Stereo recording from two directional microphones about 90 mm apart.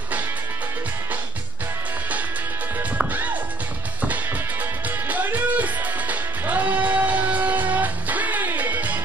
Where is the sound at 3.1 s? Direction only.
20° right (ahead or behind).